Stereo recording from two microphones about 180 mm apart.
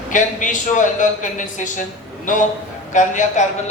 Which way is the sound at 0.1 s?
45° left (ahead or behind).